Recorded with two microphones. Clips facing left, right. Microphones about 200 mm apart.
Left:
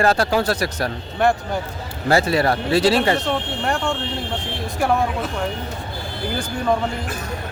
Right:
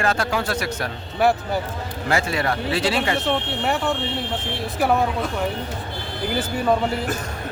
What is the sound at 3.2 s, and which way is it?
Music, 5° right (ahead or behind).